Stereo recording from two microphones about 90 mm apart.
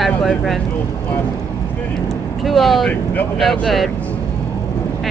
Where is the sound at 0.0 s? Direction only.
Centre (ahead or behind).